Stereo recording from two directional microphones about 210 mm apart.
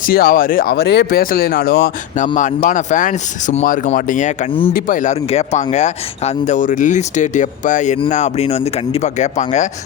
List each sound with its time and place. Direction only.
0.0 s speech: 45° left (ahead or behind)
2.2 s speech: 35° left (ahead or behind)